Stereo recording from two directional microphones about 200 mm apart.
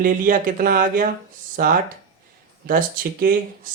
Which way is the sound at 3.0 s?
45° right (ahead or behind).